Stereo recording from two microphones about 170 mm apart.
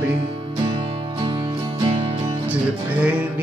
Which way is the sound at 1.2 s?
25° right (ahead or behind).